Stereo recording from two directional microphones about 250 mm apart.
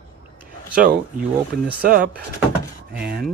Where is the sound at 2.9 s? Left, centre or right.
Right.